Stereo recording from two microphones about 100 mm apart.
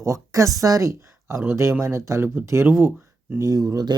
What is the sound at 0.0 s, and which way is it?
Speech, 30° right (ahead or behind).